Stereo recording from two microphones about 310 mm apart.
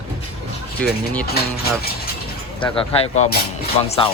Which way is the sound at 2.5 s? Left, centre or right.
Centre.